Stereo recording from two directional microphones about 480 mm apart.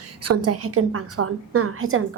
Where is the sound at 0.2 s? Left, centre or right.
Right.